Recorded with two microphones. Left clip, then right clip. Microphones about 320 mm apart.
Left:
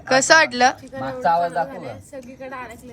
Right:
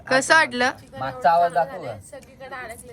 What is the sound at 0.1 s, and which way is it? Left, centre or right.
Speech, centre.